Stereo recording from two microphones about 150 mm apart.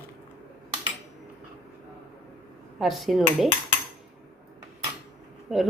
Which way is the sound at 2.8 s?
Centre (ahead or behind).